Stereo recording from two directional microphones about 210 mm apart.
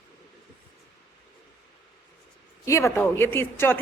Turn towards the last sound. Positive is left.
turn(degrees=10)  # may be behind; listen again after turning